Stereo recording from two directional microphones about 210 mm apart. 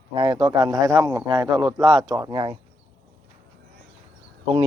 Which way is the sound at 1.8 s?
Centre (ahead or behind).